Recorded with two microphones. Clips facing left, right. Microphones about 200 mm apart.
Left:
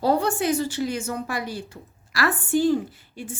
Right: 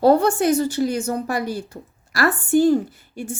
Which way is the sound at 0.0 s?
55° right (ahead or behind).